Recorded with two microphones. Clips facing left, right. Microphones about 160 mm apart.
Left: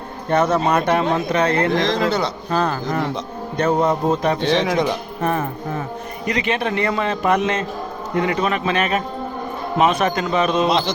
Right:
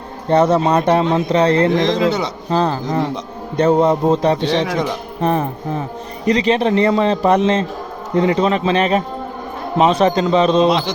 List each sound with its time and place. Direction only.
0.3 s speech: 30° right (ahead or behind)
4.6 s speech: centre (ahead or behind)
5.2 s speech: 25° right (ahead or behind)